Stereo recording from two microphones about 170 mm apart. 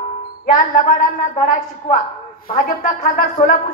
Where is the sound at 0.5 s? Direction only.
50° left (ahead or behind).